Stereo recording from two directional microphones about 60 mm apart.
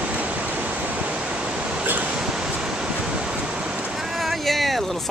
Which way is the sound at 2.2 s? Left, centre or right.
Centre.